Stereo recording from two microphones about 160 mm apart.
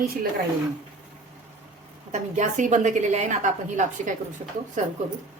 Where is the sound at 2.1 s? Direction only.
45° right (ahead or behind).